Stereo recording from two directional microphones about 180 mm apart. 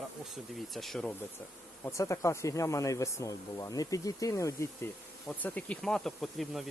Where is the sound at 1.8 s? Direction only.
15° left (ahead or behind).